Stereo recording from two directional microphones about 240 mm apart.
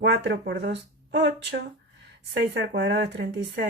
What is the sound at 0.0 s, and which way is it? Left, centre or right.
Speech, right.